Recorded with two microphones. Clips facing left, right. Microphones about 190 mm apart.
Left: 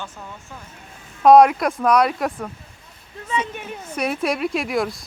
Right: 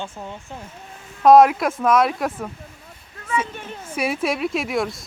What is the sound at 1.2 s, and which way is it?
Speech, centre (ahead or behind).